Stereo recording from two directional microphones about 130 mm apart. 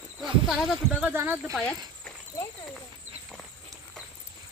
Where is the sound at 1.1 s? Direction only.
15° right (ahead or behind).